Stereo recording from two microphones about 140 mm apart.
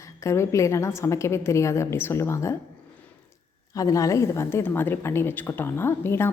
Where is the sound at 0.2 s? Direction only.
20° left (ahead or behind).